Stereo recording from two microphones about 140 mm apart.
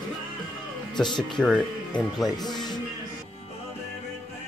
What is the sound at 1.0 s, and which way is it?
Speech, 5° left (ahead or behind).